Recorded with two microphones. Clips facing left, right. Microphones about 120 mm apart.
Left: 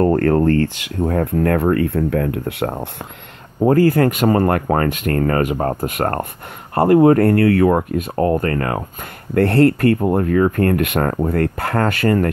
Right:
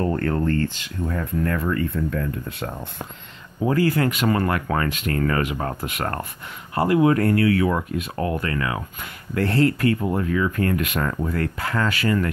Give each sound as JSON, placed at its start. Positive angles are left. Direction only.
{"t": 0.0, "sound": "speech", "side_deg": 70}
{"t": 3.6, "sound": "speech", "side_deg": 45}
{"t": 9.3, "sound": "speech", "side_deg": 55}